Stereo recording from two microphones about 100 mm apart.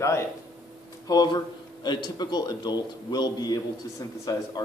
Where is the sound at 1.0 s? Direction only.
45° left (ahead or behind).